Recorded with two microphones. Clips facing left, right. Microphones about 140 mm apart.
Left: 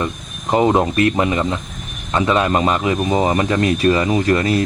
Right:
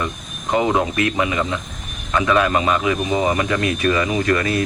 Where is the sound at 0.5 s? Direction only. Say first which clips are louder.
Left 3 dB; 35° left (ahead or behind).